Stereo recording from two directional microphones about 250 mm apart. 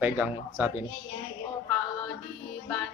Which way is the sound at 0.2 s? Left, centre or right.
Centre.